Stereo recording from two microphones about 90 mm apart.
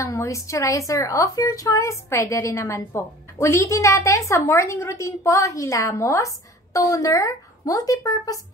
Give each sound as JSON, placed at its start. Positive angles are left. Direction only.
{"t": 0.0, "sound": "a woman's voice", "side_deg": 35}